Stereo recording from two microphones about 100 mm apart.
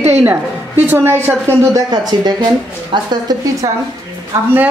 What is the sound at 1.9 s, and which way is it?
A woman's voice, 40° right (ahead or behind).